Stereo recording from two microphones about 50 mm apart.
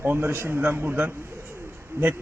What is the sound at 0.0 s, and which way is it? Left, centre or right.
Speech, right.